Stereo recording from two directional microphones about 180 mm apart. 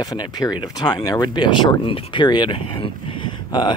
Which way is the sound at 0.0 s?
20° left (ahead or behind).